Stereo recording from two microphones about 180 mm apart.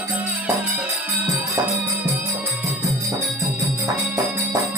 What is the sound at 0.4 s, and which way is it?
Music, 10° right (ahead or behind).